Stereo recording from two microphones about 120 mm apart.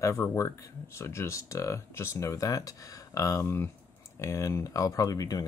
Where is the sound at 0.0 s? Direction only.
25° left (ahead or behind).